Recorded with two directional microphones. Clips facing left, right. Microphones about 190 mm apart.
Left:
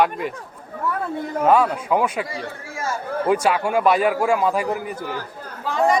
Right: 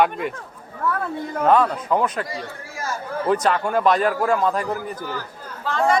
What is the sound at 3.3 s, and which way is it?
A man's voice, 10° left (ahead or behind).